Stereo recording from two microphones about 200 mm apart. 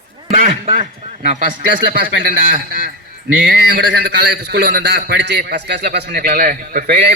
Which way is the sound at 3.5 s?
55° right (ahead or behind).